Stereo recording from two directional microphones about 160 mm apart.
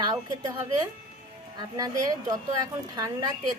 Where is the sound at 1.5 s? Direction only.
25° right (ahead or behind).